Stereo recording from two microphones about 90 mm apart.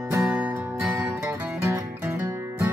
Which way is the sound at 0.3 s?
15° right (ahead or behind).